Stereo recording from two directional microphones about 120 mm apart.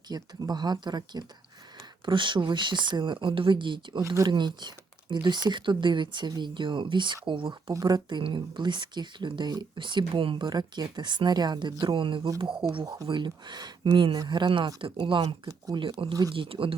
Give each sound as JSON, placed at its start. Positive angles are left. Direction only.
{"t": 0.1, "sound": "speech", "side_deg": -35}
{"t": 4.0, "sound": "speech", "side_deg": -25}
{"t": 4.3, "sound": "speech", "side_deg": -40}
{"t": 7.7, "sound": "speech", "side_deg": -30}
{"t": 12.8, "sound": "speech", "side_deg": -30}
{"t": 13.1, "sound": "speech", "side_deg": -40}
{"t": 15.4, "sound": "speech", "side_deg": -30}
{"t": 15.8, "sound": "speech", "side_deg": -45}